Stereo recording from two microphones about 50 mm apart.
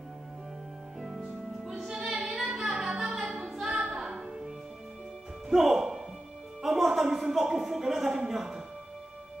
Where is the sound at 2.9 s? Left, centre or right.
Centre.